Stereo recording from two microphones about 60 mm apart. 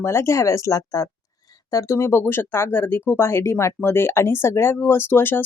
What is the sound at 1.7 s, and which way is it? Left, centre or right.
Speech, left.